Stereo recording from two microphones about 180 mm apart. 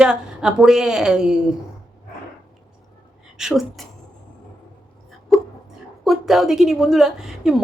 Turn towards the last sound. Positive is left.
turn(degrees=-5)  # may be behind; listen again after turning